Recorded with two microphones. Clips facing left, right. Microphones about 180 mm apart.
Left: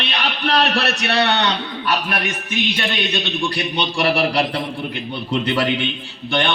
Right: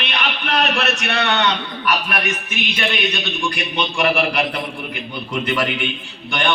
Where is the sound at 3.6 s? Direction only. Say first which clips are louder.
Even; 35° left (ahead or behind).